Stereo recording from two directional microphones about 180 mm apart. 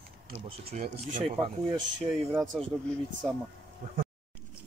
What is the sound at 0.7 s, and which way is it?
Speech, 40° right (ahead or behind).